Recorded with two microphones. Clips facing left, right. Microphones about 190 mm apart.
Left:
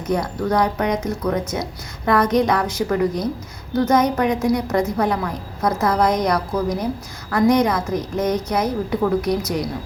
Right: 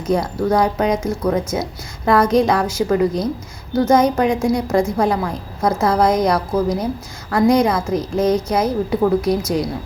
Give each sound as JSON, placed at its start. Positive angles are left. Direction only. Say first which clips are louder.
{"t": 0.1, "sound": "a woman's voice", "louder": "right 3 dB", "side_deg": -25}